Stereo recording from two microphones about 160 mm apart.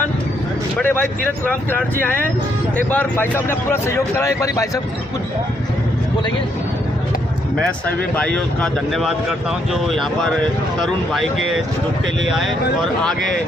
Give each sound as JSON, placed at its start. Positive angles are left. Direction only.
{"t": 0.8, "sound": "speech", "side_deg": 10}
{"t": 7.6, "sound": "speech", "side_deg": 10}